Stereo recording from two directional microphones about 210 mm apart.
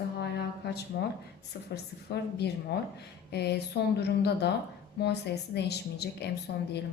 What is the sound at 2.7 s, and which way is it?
A woman's voice, 55° left (ahead or behind).